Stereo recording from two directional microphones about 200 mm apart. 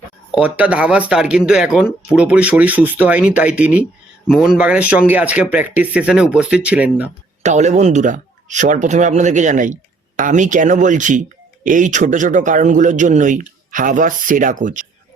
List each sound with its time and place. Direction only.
0.3 s speech: 5° right (ahead or behind)
7.4 s speech: 35° right (ahead or behind)